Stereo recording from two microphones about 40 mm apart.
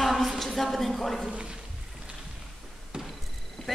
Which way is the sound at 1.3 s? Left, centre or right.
Right.